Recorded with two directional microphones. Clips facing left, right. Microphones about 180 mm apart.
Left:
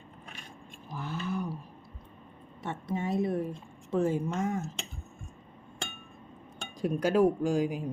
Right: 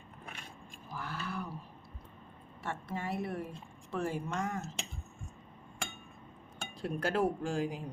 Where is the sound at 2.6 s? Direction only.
20° left (ahead or behind).